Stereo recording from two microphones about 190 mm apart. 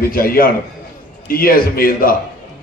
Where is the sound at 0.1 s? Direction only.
50° left (ahead or behind).